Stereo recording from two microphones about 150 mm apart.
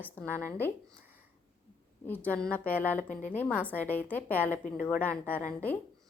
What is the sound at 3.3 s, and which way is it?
A woman's voice, 10° left (ahead or behind).